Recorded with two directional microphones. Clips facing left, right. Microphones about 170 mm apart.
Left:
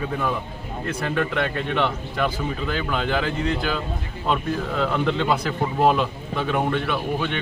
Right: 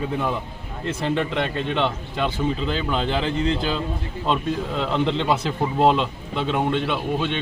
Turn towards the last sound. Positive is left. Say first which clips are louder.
# right 1 dB
turn(degrees=-25)  # may be behind; listen again after turning